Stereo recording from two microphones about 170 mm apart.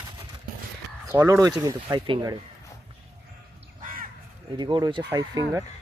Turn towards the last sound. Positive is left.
turn(degrees=-20)  # may be behind; listen again after turning